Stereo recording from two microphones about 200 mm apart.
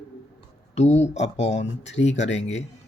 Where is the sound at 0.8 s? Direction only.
35° left (ahead or behind).